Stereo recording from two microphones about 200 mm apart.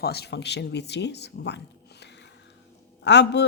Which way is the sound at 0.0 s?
55° left (ahead or behind).